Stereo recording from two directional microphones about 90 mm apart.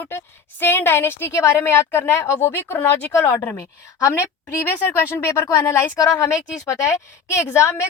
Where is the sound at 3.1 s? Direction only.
35° left (ahead or behind).